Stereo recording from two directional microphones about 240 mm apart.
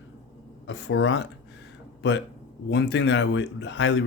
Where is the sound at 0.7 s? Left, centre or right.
Left.